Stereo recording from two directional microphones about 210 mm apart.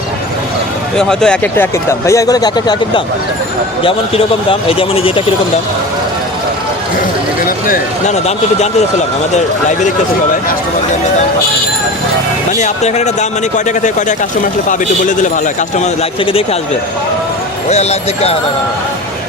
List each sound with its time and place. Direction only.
0.9 s speech: 5° left (ahead or behind); by 5.2 s 25° left (ahead or behind)
7.4 s speech: 40° left (ahead or behind)
12.5 s speech: 35° left (ahead or behind)
15.8 s speech: 30° left (ahead or behind)
17.7 s speech: 30° left (ahead or behind)